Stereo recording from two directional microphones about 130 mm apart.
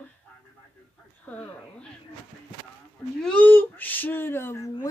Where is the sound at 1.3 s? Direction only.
15° left (ahead or behind).